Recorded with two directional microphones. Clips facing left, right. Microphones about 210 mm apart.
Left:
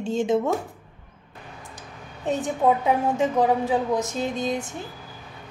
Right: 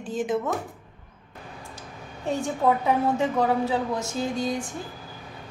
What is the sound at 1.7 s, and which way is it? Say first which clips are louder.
A woman's voice: right 1 dB; 20° left (ahead or behind).